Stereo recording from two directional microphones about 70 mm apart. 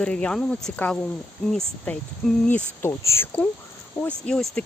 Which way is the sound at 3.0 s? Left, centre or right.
Left.